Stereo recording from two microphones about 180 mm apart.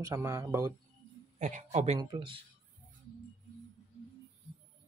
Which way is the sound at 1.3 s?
40° right (ahead or behind).